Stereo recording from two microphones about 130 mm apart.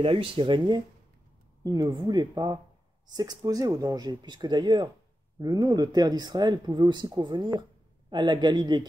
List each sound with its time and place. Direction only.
0.0 s speech: 45° right (ahead or behind)